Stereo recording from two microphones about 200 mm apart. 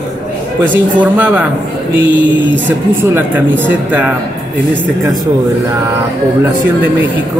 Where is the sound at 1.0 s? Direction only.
5° right (ahead or behind).